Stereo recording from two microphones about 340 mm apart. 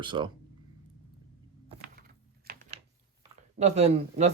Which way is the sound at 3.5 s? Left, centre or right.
Centre.